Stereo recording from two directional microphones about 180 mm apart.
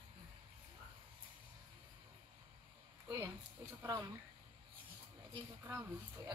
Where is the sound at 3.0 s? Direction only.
15° right (ahead or behind).